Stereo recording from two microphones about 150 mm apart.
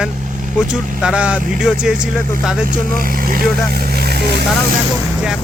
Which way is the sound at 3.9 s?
90° right.